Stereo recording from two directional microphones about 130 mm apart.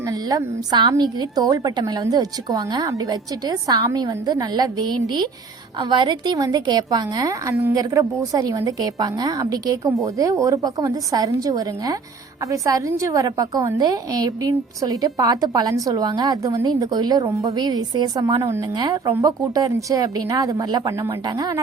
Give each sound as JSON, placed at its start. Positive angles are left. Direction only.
{"t": 0.1, "sound": "a woman's voice", "side_deg": -30}